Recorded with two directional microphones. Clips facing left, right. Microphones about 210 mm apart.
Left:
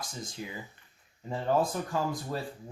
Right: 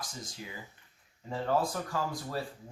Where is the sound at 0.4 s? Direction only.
20° left (ahead or behind).